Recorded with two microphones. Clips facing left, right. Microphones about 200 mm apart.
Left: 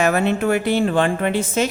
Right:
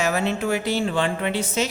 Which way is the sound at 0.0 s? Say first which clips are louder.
Left 5 dB; 55° left (ahead or behind).